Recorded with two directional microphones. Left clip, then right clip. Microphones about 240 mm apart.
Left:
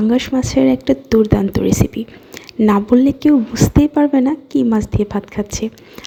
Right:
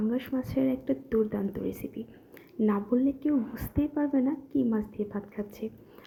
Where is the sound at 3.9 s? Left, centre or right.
Left.